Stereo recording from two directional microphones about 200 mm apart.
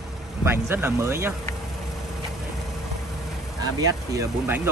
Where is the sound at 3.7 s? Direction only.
15° right (ahead or behind).